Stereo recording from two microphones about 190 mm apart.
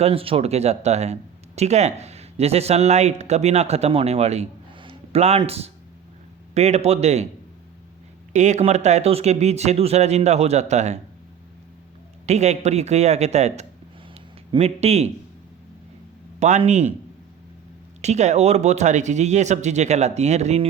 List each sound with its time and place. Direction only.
0.0 s speech: 30° right (ahead or behind)
8.3 s speech: 40° right (ahead or behind)
12.2 s speech: 35° right (ahead or behind)
14.1 s a sound: 35° right (ahead or behind)
16.4 s speech: 35° right (ahead or behind)
18.0 s speech: 35° right (ahead or behind)